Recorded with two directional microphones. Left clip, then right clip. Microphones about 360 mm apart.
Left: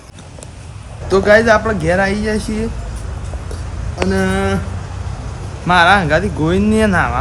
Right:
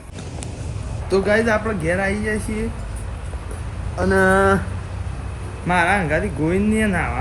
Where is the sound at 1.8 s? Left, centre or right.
Centre.